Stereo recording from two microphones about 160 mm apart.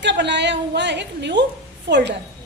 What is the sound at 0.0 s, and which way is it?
A woman's voice, 90° right.